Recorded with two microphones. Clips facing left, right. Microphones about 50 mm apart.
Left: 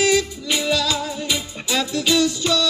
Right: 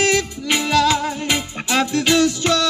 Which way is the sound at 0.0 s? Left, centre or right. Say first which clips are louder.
Even; right.